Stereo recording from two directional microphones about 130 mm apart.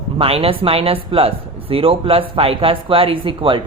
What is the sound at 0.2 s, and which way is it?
Speech, 50° right (ahead or behind).